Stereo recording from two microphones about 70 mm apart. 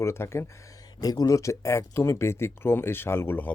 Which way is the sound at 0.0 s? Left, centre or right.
Left.